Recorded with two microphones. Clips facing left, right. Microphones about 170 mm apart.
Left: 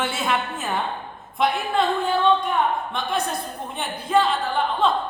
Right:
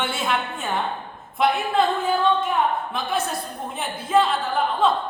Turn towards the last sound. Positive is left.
turn(degrees=0)  # may be behind; listen again after turning